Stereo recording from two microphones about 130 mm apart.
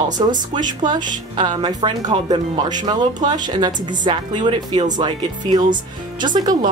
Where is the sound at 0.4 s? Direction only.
35° right (ahead or behind).